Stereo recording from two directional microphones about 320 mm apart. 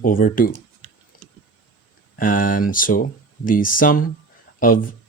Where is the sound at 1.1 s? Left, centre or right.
Left.